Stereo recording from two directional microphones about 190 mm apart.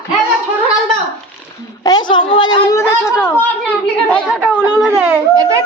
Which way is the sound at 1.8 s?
20° left (ahead or behind).